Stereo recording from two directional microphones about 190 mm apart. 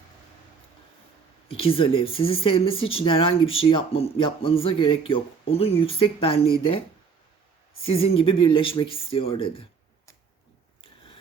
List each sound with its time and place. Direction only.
1.5 s speech: 30° left (ahead or behind)
7.9 s speech: 30° left (ahead or behind)